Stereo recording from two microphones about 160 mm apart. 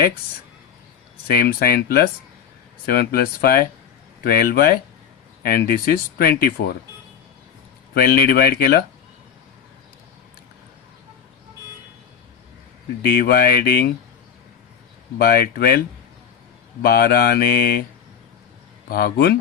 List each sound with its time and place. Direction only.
1.3 s speech: 70° left (ahead or behind)
7.9 s speech: 70° left (ahead or behind)
13.1 s speech: 70° left (ahead or behind)
15.2 s speech: 70° left (ahead or behind)
16.8 s speech: 70° left (ahead or behind)
18.9 s speech: 70° left (ahead or behind)